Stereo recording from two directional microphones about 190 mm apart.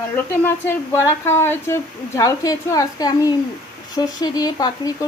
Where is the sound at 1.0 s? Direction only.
15° left (ahead or behind).